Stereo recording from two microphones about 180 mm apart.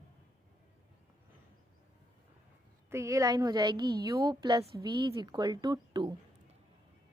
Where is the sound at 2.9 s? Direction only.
15° right (ahead or behind).